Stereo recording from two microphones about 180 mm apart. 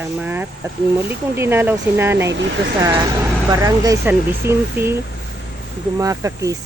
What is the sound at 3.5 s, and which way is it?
Speech, 20° right (ahead or behind).